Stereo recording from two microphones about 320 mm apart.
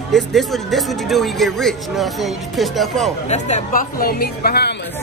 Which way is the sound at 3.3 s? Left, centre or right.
Left.